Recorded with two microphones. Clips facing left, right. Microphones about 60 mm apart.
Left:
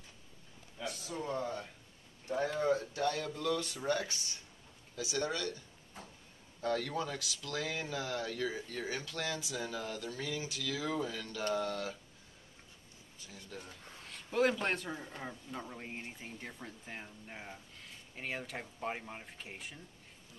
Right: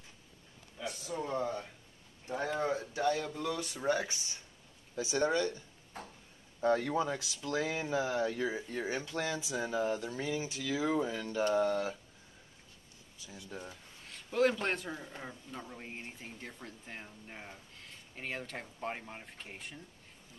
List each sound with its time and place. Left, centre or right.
0.8 s a sound: right
4.9 s speech: right
5.9 s a sound: right
6.6 s speech: right
13.5 s speech: right
14.0 s a man's voice: centre